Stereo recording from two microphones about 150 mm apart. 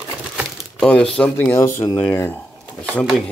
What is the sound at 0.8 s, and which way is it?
Speech, 5° left (ahead or behind).